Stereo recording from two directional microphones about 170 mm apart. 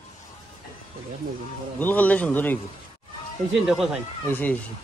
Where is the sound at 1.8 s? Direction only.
10° left (ahead or behind).